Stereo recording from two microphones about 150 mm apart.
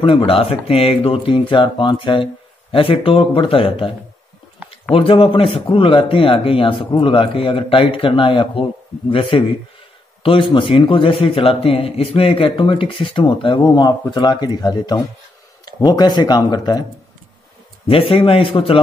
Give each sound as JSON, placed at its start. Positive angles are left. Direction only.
{"t": 0.0, "sound": "a man's voice", "side_deg": 35}
{"t": 4.9, "sound": "a man's voice", "side_deg": 35}
{"t": 17.8, "sound": "a man's voice", "side_deg": 35}